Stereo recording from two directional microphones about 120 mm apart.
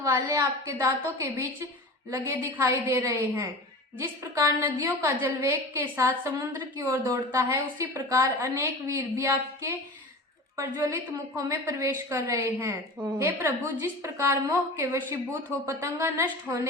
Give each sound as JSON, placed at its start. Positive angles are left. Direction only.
{"t": 0.0, "sound": "a woman's voice", "side_deg": -25}